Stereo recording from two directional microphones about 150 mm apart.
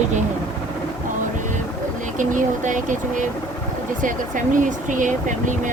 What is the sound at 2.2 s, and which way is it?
Speech, 60° right (ahead or behind).